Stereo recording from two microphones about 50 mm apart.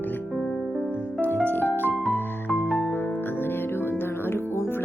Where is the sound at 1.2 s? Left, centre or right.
Left.